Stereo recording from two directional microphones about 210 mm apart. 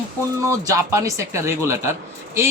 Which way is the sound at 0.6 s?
15° right (ahead or behind).